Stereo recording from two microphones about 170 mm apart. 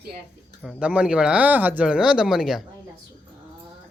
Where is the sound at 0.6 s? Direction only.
5° right (ahead or behind).